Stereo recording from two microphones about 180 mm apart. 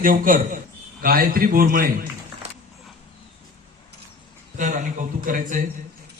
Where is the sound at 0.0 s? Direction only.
50° right (ahead or behind).